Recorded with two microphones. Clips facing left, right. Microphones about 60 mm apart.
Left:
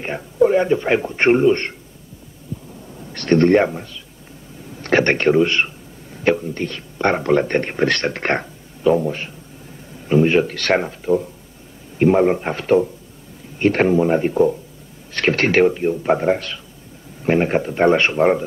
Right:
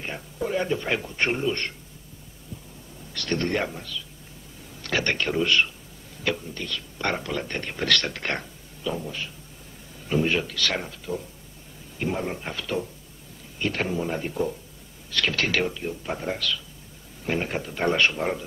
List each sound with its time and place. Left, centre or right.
0.0 s a man's voice: left
2.5 s heart sounds: centre
3.1 s a man's voice: left
10.0 s a sound: left
10.4 s a man's voice: left